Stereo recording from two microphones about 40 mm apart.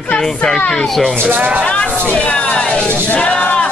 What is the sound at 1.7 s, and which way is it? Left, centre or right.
Speech, left.